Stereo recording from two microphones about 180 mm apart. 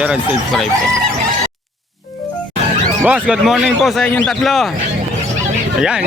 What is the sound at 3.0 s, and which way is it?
Speech, 5° right (ahead or behind).